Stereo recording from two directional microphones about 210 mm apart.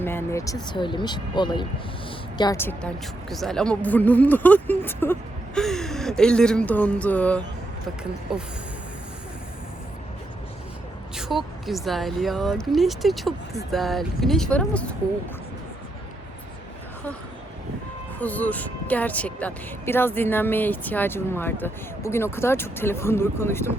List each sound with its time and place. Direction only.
0.0 s speech: 10° left (ahead or behind)
11.2 s speech: centre (ahead or behind)
18.2 s speech: 5° left (ahead or behind)